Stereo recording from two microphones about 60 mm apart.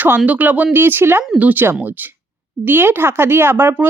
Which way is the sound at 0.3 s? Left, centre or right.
Right.